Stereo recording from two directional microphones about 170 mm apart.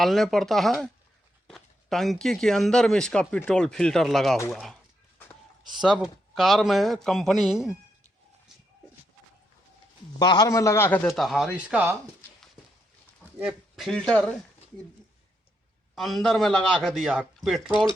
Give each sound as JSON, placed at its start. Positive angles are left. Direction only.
{"t": 0.0, "sound": "speech", "side_deg": 0}
{"t": 5.8, "sound": "speech", "side_deg": -5}
{"t": 10.2, "sound": "a man's voice", "side_deg": 25}
{"t": 11.1, "sound": "speech", "side_deg": 0}
{"t": 13.4, "sound": "speech", "side_deg": -5}
{"t": 16.0, "sound": "speech", "side_deg": 0}